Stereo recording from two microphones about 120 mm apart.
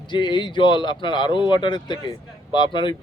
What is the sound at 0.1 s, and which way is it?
Speech, 40° left (ahead or behind).